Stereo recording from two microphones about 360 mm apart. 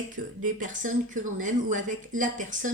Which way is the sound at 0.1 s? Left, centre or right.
Right.